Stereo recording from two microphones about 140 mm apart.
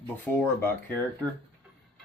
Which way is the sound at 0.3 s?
15° left (ahead or behind).